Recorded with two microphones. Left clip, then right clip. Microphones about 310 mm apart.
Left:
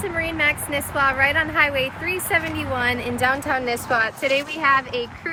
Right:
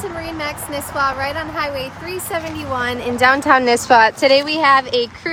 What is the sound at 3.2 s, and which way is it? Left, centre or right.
A woman's voice, right.